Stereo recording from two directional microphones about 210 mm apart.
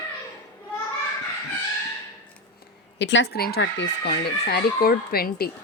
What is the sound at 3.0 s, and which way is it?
A woman's voice, 60° left (ahead or behind).